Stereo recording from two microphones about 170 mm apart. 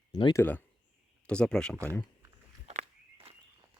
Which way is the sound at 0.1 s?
25° left (ahead or behind).